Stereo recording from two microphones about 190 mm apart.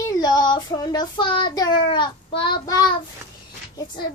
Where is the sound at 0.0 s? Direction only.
20° left (ahead or behind).